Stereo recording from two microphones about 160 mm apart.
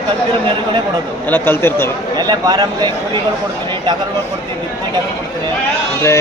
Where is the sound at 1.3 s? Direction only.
15° left (ahead or behind).